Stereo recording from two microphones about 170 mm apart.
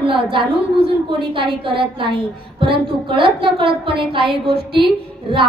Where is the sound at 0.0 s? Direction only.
30° right (ahead or behind).